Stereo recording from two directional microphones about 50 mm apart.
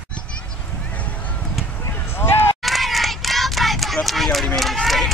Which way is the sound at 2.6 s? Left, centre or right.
Centre.